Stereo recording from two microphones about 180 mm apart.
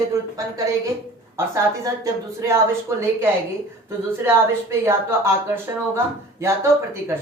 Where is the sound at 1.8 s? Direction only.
15° right (ahead or behind).